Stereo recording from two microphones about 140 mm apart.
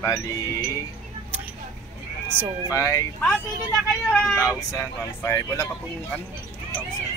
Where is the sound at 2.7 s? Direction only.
25° left (ahead or behind).